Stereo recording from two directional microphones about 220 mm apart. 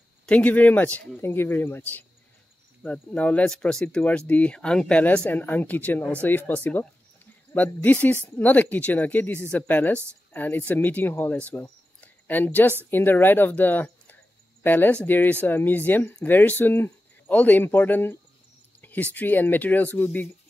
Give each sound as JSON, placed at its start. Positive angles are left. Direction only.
{"t": 0.3, "sound": "speech", "side_deg": 5}